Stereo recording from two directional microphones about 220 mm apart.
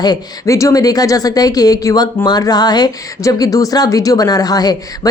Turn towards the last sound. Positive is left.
turn(degrees=15)  # may be behind; listen again after turning